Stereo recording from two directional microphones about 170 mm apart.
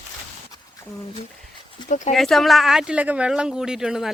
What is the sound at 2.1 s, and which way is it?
Speech, centre (ahead or behind).